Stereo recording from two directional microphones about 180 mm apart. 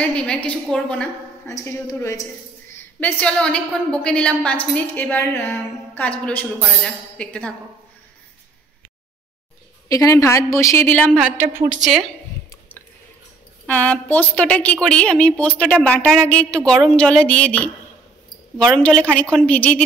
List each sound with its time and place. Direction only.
0.0 s a woman's voice: 5° left (ahead or behind)
1.5 s a woman's voice: 15° left (ahead or behind)
9.8 s a woman's voice: 20° left (ahead or behind)
11.1 s a woman's voice: 5° right (ahead or behind)
11.8 s a woman's voice: centre (ahead or behind)
13.7 s a woman's voice: 10° left (ahead or behind)